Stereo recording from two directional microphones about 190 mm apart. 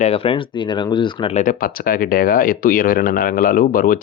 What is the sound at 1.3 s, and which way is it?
Speech, 45° left (ahead or behind).